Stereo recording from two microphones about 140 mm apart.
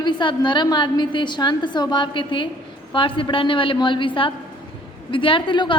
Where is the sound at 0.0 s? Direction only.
35° left (ahead or behind).